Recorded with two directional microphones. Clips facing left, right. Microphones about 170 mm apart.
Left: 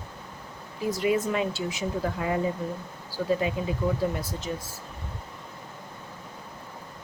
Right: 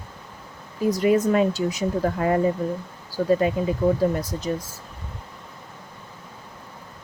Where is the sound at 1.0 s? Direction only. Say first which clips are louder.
Right 6 dB; 40° right (ahead or behind).